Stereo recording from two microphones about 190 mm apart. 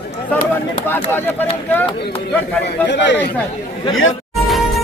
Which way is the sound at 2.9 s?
65° left (ahead or behind).